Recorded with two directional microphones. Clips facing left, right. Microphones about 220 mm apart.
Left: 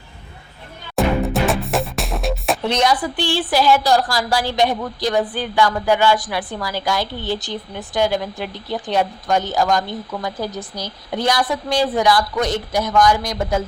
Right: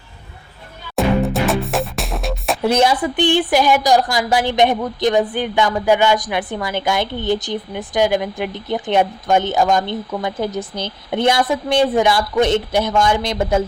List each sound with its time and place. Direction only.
0.9 s music: centre (ahead or behind)
2.7 s a woman's voice: 25° right (ahead or behind)